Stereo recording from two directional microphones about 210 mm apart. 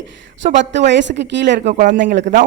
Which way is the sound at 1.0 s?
55° right (ahead or behind).